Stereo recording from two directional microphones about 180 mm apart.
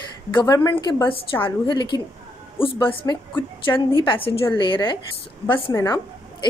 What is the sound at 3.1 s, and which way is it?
Speech, 15° left (ahead or behind).